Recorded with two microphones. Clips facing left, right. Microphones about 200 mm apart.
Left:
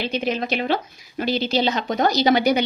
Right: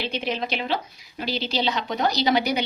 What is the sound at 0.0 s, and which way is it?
A woman's voice, 45° left (ahead or behind).